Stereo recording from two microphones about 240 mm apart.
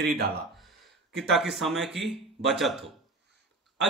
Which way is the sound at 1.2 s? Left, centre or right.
Centre.